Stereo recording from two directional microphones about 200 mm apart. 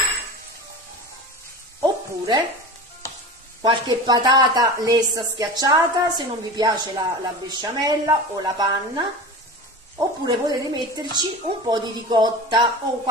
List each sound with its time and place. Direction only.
1.8 s sizzle: 20° right (ahead or behind)
3.6 s speech: 20° right (ahead or behind)